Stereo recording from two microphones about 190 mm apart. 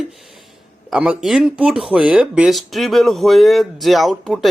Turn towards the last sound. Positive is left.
turn(degrees=0)  # may be behind; listen again after turning